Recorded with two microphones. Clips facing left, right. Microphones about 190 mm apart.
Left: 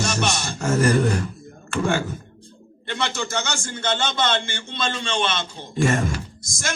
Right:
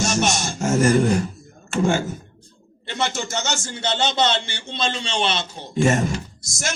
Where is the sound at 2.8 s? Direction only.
55° left (ahead or behind).